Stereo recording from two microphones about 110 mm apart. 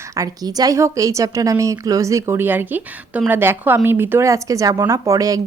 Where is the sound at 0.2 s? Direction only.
35° right (ahead or behind).